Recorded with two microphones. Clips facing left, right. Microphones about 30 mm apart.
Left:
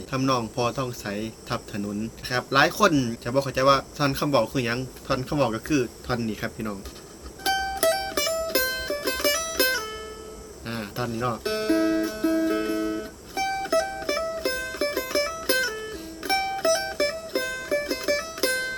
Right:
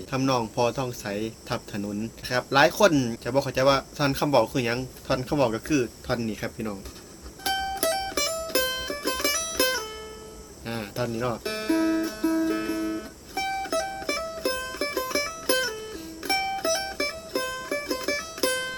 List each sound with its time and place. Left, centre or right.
0.1 s speech: centre
7.9 s mandolin: centre
8.3 s music: centre
10.7 s speech: centre
11.5 s music: centre
15.2 s music: left
15.7 s music: centre
17.4 s music: left
17.7 s music: centre
18.0 s mandolin: centre
18.4 s music: left